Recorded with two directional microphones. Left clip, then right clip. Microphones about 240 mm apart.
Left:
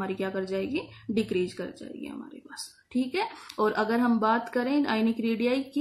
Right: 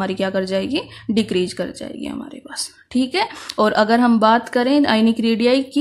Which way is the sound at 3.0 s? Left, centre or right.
Right.